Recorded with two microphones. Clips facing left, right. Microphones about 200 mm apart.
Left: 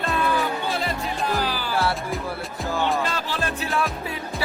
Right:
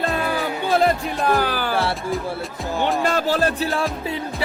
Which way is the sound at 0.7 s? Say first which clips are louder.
Right 8 dB; 55° right (ahead or behind).